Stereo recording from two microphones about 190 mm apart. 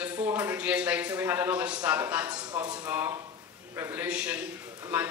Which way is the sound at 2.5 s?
20° right (ahead or behind).